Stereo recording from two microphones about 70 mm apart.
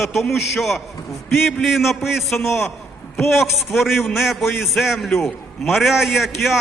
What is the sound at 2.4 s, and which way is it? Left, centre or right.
Speech, left.